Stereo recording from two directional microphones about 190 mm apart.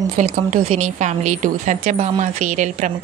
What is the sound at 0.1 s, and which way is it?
A woman's voice, 40° right (ahead or behind).